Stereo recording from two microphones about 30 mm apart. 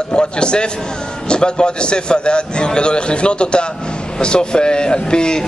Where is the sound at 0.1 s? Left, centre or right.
Left.